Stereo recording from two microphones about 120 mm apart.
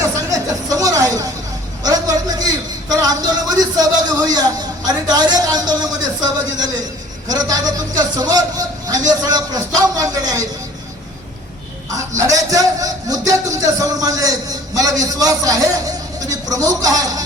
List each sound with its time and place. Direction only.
0.0 s music: 30° right (ahead or behind)
1.8 s a sound: 30° right (ahead or behind)
5.0 s speech: 35° right (ahead or behind)
11.9 s a man's voice: 25° right (ahead or behind)